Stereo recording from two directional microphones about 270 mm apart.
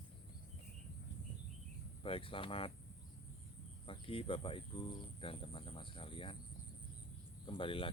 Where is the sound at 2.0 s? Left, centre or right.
Centre.